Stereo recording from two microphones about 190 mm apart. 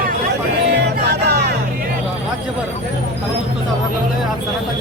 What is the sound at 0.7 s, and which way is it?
Music, 60° right (ahead or behind).